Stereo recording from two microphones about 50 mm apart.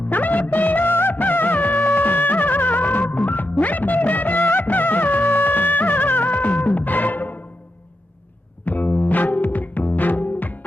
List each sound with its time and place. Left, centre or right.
0.1 s music of bollywood: left
8.6 s music: left